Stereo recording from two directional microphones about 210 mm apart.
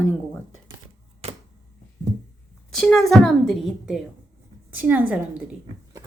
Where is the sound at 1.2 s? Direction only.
30° right (ahead or behind).